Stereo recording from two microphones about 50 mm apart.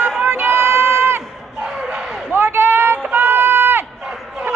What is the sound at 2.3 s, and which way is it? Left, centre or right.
Run, right.